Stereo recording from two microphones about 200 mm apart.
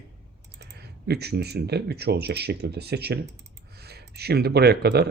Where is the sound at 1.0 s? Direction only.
55° right (ahead or behind).